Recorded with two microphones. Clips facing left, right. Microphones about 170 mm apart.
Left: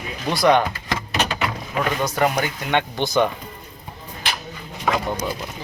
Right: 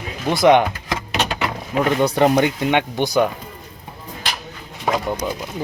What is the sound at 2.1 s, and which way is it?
Speech, 25° right (ahead or behind).